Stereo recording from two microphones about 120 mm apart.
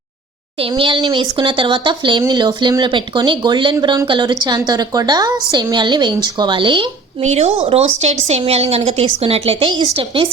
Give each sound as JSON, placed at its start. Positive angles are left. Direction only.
{"t": 0.8, "sound": "speech", "side_deg": -40}
{"t": 7.3, "sound": "a woman's voice", "side_deg": -60}